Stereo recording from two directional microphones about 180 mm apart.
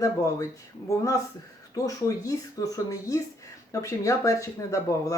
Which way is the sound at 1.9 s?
20° left (ahead or behind).